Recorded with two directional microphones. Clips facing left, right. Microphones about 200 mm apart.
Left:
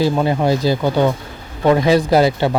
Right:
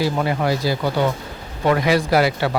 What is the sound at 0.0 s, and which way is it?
Speech, 25° left (ahead or behind).